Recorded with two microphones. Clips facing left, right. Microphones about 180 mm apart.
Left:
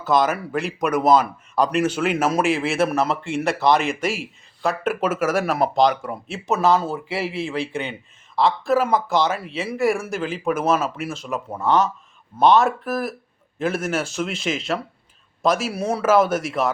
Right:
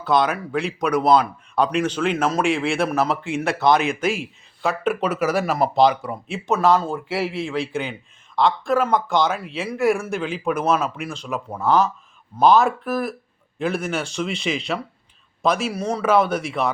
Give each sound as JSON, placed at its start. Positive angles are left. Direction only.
{"t": 0.0, "sound": "speech", "side_deg": 0}